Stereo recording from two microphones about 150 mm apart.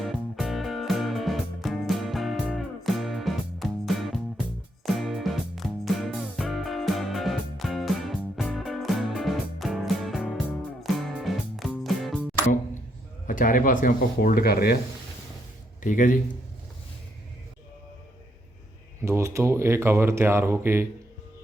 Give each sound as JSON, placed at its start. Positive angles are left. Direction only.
{"t": 0.0, "sound": "music", "side_deg": 0}
{"t": 13.2, "sound": "speech", "side_deg": 65}
{"t": 15.8, "sound": "a man's voice", "side_deg": 60}
{"t": 19.0, "sound": "speech", "side_deg": -20}